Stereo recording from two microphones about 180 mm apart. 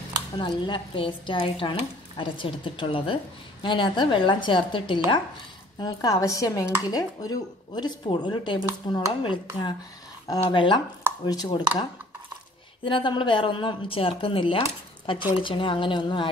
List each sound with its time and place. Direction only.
0.4 s a woman's voice: 25° left (ahead or behind)